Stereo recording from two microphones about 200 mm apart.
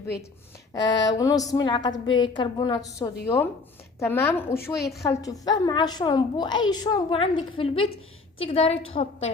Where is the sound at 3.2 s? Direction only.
10° left (ahead or behind).